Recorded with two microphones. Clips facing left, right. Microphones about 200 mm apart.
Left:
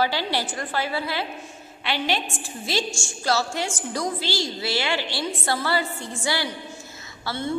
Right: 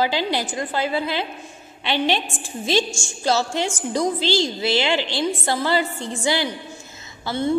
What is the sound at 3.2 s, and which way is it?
A woman's voice, 20° right (ahead or behind).